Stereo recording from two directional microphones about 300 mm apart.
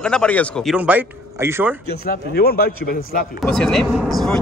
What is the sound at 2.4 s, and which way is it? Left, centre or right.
Speech, left.